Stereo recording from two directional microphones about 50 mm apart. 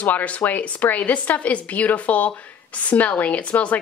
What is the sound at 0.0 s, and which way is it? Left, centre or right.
A woman's voice, left.